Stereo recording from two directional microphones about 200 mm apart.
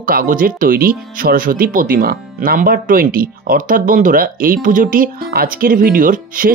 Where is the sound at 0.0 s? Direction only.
45° right (ahead or behind).